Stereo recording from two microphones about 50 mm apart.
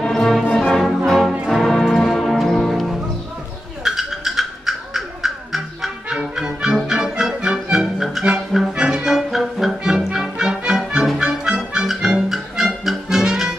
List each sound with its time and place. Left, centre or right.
0.0 s music: centre
0.7 s music: centre
8.7 s brass instrument: centre
9.8 s music: centre